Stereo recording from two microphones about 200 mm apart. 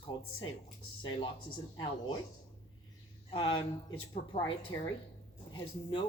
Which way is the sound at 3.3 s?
25° left (ahead or behind).